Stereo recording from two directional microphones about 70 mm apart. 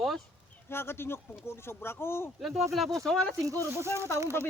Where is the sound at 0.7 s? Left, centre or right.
Left.